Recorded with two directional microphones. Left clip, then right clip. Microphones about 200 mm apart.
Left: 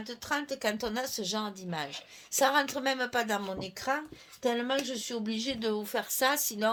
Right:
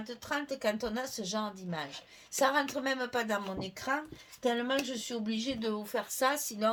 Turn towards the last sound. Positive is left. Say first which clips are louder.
# left 2 dB
turn(degrees=40)  # may be behind; listen again after turning